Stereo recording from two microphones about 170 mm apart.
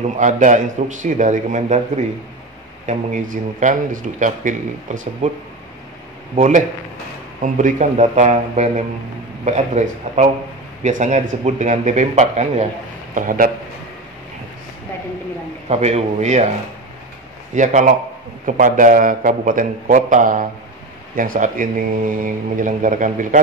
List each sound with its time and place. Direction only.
0.2 s speech: 45° right (ahead or behind)
2.9 s speech: 50° right (ahead or behind)
6.3 s a man's voice: 45° right (ahead or behind)
13.1 s speech: 50° right (ahead or behind)
15.7 s a man's voice: 40° right (ahead or behind)
17.6 s speech: 45° right (ahead or behind)